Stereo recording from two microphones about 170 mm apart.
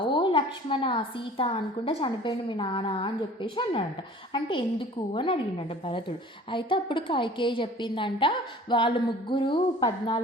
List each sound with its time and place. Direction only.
0.0 s a woman's voice: 30° left (ahead or behind)